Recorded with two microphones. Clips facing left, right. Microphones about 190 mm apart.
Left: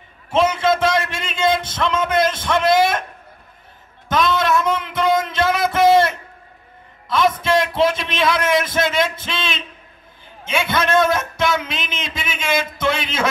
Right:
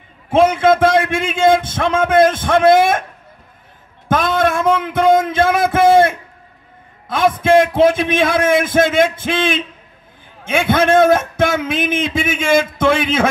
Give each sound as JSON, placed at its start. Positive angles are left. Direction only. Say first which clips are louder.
{"t": 0.3, "sound": "a man's voice", "louder": "right 5 dB", "side_deg": -55}
{"t": 4.1, "sound": "a sound", "louder": "right 2 dB", "side_deg": -50}
{"t": 7.1, "sound": "a man's voice", "louder": "right 4 dB", "side_deg": -50}